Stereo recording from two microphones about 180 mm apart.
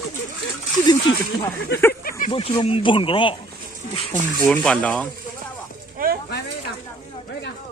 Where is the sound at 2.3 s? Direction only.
30° left (ahead or behind).